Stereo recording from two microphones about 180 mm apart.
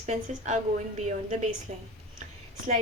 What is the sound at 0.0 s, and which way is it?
A woman's voice, 40° right (ahead or behind).